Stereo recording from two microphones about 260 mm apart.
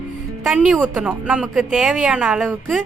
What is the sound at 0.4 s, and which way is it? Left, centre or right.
Speech, centre.